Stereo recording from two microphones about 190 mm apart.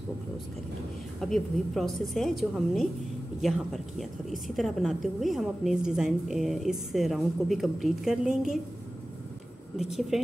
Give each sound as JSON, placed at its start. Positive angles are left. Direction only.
{"t": 1.2, "sound": "a woman's voice", "side_deg": 0}
{"t": 9.8, "sound": "a woman's voice", "side_deg": 0}